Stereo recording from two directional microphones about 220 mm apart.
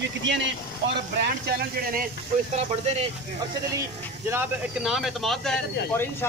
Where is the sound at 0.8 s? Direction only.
50° right (ahead or behind).